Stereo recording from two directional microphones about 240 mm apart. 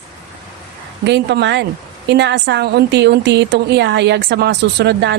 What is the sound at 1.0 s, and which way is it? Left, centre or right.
A woman's voice, right.